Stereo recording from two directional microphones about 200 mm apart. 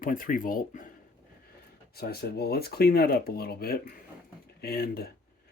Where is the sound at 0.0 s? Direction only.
45° left (ahead or behind).